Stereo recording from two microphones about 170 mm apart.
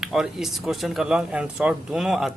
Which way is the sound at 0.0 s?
5° right (ahead or behind).